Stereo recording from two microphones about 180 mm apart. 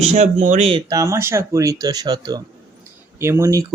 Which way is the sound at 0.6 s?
25° right (ahead or behind).